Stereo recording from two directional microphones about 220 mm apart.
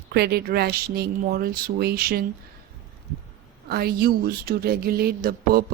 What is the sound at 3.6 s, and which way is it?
Speech, 45° right (ahead or behind).